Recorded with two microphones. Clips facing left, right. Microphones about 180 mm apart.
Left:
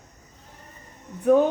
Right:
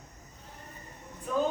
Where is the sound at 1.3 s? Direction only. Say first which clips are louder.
Left 13 dB; 70° left (ahead or behind).